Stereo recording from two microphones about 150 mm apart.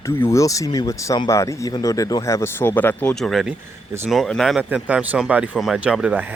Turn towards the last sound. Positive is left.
turn(degrees=-10)  # may be behind; listen again after turning